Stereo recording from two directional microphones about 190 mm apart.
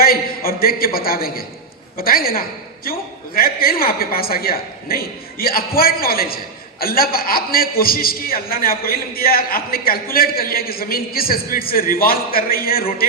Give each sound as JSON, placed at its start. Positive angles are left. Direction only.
{"t": 0.0, "sound": "a man's voice", "side_deg": 50}